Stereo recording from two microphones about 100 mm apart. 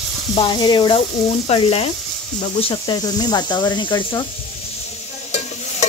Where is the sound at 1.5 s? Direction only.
75° left (ahead or behind).